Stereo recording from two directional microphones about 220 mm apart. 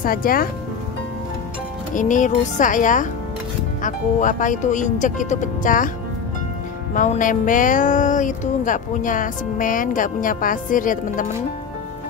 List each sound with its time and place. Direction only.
0.0 s speech: 40° left (ahead or behind)
2.0 s speech: 35° left (ahead or behind)
6.9 s speech: 35° left (ahead or behind)